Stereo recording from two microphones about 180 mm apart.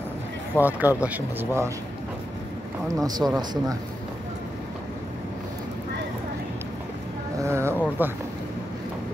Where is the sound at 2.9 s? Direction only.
20° right (ahead or behind).